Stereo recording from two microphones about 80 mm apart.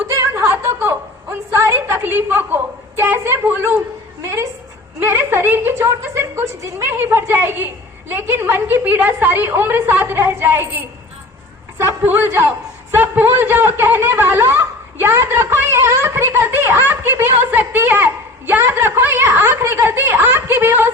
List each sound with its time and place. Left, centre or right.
0.1 s a sound: right
4.9 s a woman's voice: right
7.0 s a man's voice: right